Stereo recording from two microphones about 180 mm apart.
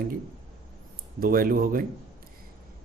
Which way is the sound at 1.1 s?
55° right (ahead or behind).